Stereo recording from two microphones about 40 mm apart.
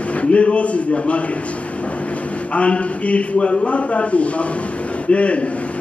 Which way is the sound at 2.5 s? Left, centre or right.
Left.